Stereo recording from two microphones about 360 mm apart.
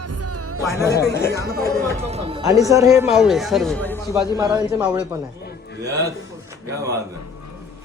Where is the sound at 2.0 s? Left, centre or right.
Centre.